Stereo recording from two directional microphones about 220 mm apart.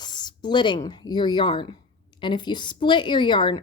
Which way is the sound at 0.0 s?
20° left (ahead or behind).